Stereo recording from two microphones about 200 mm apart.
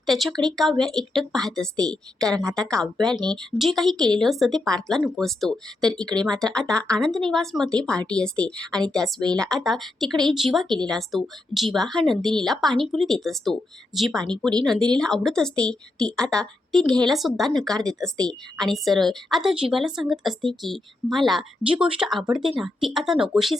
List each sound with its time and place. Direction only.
0.0 s speech: centre (ahead or behind)
2.3 s a woman's voice: 15° right (ahead or behind)
2.6 s speech: 5° left (ahead or behind)